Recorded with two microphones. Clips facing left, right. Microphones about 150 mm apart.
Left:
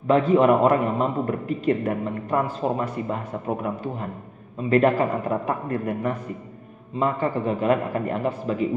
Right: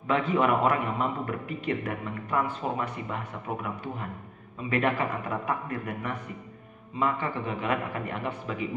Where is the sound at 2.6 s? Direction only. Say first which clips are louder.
Left 6 dB; 30° left (ahead or behind).